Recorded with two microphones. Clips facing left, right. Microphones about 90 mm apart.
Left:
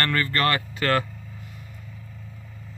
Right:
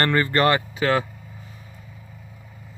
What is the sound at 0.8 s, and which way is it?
Speech, 10° right (ahead or behind).